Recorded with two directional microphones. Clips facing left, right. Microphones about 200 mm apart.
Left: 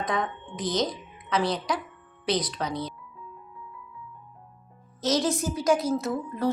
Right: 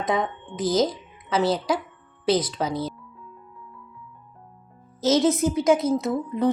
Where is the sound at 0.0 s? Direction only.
25° right (ahead or behind).